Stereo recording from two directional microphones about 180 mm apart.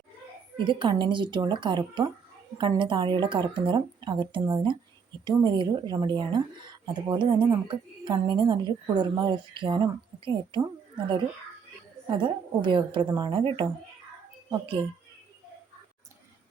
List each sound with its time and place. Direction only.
0.5 s a woman's voice: 25° right (ahead or behind)
12.0 s a woman's voice: 25° right (ahead or behind)